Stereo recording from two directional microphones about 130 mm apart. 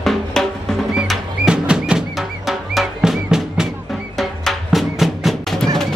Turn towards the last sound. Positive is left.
turn(degrees=0)  # may be behind; listen again after turning